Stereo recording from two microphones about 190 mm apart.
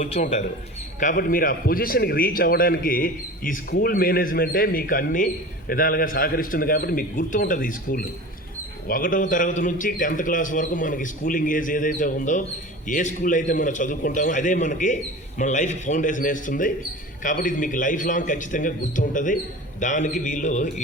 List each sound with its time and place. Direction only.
0.0 s a man's voice: 40° left (ahead or behind)